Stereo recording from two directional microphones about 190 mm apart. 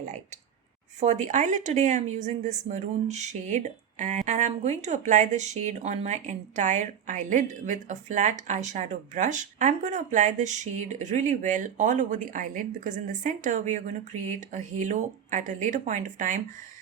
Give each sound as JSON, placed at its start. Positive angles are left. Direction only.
{"t": 0.9, "sound": "speech", "side_deg": -35}